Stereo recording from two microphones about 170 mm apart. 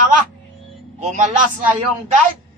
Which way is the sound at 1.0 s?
45° right (ahead or behind).